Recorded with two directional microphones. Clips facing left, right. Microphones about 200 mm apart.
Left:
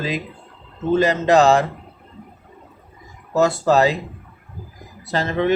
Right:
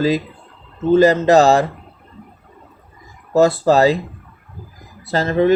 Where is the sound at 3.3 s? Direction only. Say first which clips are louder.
Right 4 dB; 35° right (ahead or behind).